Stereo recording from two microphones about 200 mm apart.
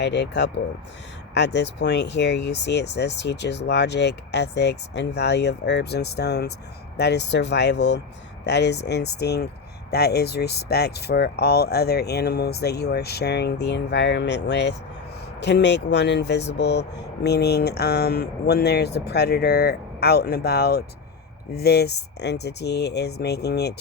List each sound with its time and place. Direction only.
0.0 s speech: 60° left (ahead or behind)